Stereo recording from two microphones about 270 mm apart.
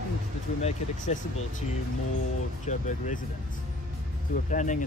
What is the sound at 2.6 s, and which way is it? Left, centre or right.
Speech, left.